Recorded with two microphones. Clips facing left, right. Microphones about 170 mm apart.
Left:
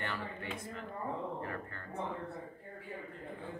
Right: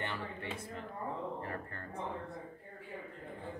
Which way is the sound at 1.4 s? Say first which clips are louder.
Left 1 dB; 35° right (ahead or behind).